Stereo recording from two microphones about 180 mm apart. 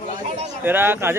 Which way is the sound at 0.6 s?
10° right (ahead or behind).